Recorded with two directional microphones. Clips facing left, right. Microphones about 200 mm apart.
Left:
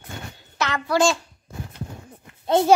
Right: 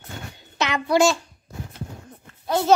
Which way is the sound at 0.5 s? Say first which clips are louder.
Right 2 dB; 20° right (ahead or behind).